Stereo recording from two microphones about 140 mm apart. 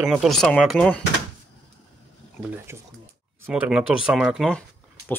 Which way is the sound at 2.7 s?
20° right (ahead or behind).